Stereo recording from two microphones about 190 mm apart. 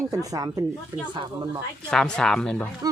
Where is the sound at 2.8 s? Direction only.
20° right (ahead or behind).